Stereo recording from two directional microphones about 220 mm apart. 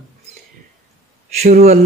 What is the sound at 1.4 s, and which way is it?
Mantra, 35° right (ahead or behind).